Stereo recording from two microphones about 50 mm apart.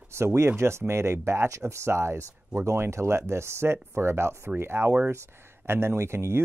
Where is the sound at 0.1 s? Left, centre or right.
Right.